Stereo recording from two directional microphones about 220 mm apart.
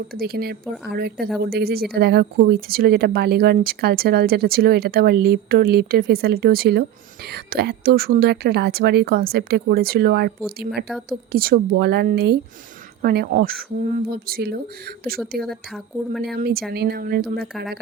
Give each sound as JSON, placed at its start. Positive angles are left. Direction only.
{"t": 0.1, "sound": "a woman's voice", "side_deg": -45}
{"t": 15.4, "sound": "speech", "side_deg": 0}
{"t": 16.3, "sound": "a woman's voice", "side_deg": -45}